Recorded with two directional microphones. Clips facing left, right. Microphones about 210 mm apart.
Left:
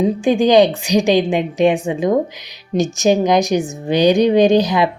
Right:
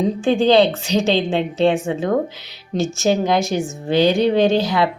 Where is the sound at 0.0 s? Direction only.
15° left (ahead or behind).